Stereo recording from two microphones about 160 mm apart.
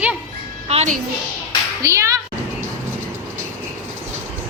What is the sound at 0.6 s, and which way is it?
Speech, 45° right (ahead or behind).